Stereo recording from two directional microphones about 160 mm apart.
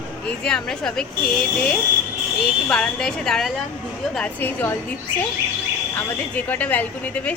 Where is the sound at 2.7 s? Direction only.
5° left (ahead or behind).